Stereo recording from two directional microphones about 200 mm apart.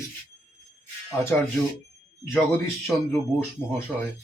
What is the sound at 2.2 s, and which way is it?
Speech, 10° left (ahead or behind).